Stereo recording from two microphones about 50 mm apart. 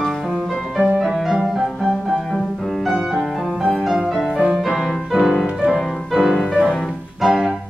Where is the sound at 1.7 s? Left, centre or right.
Centre.